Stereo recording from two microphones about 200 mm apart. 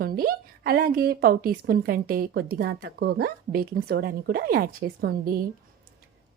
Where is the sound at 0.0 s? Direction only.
50° right (ahead or behind).